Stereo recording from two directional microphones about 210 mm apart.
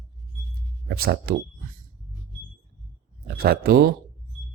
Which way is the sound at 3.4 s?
45° right (ahead or behind).